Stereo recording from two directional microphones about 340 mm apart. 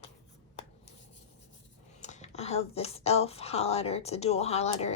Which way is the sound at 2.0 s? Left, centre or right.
Centre.